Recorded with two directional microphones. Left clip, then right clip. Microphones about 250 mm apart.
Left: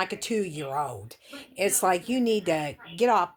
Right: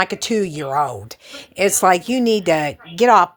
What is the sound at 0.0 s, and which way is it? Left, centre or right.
A woman's voice, right.